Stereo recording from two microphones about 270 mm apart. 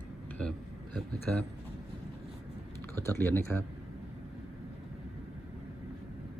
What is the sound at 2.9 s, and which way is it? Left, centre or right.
Speech, centre.